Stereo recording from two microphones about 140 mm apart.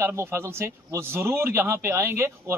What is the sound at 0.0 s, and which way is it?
A man's voice, 20° right (ahead or behind).